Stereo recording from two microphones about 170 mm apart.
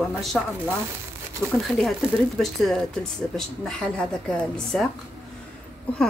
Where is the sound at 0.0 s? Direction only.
Centre (ahead or behind).